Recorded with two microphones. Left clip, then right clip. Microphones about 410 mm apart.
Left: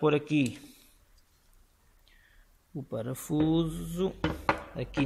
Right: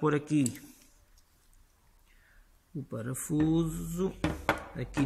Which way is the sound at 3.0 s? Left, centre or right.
Centre.